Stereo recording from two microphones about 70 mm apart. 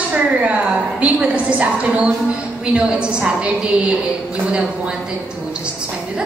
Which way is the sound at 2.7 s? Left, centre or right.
Centre.